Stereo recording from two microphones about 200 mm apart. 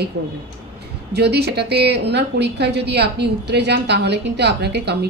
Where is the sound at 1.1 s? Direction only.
55° right (ahead or behind).